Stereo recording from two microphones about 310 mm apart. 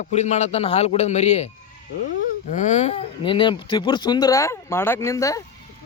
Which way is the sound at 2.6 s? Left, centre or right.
Left.